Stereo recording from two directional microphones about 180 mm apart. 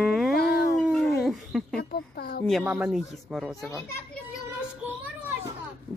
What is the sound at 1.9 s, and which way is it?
Speech, 60° left (ahead or behind).